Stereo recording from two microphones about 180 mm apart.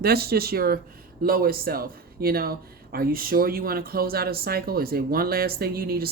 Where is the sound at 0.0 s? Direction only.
60° right (ahead or behind).